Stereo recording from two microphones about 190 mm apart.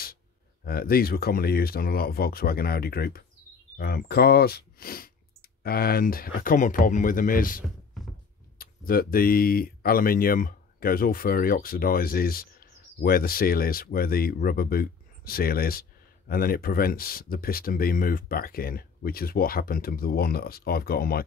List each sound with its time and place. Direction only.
0.7 s speech: 50° left (ahead or behind)